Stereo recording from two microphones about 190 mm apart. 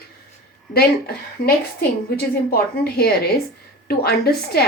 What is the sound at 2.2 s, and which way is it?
A woman's voice, 55° left (ahead or behind).